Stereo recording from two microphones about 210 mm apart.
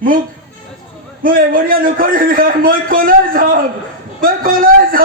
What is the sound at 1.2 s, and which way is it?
A man's voice, 40° right (ahead or behind).